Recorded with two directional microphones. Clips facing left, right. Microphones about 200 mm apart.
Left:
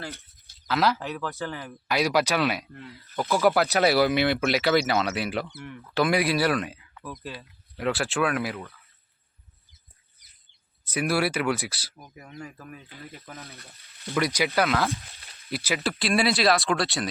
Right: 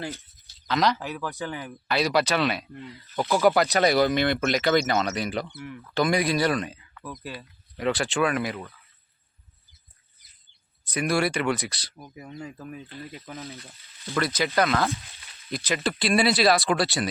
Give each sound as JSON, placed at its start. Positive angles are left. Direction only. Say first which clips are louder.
{"t": 0.7, "sound": "speech", "louder": "even", "side_deg": 5}
{"t": 1.9, "sound": "speech", "louder": "even", "side_deg": 10}
{"t": 6.9, "sound": "a sound", "louder": "even", "side_deg": 10}
{"t": 7.8, "sound": "speech", "louder": "right 1 dB", "side_deg": 0}
{"t": 10.9, "sound": "speech", "louder": "right 1 dB", "side_deg": 5}
{"t": 12.1, "sound": "speech", "louder": "right 3 dB", "side_deg": -15}
{"t": 14.1, "sound": "speech", "louder": "left 1 dB", "side_deg": 15}
{"t": 14.5, "sound": "speech", "louder": "right 1 dB", "side_deg": 0}